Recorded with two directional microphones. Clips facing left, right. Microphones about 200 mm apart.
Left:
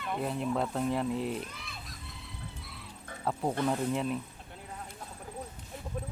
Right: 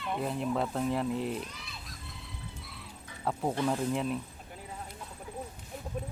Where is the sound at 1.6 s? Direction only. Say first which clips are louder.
Left 1 dB; centre (ahead or behind).